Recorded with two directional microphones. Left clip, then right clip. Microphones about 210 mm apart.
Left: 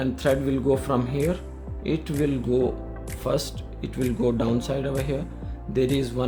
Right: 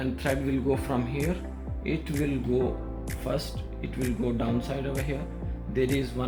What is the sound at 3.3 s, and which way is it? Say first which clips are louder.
Speech: left 6 dB; 45° left (ahead or behind).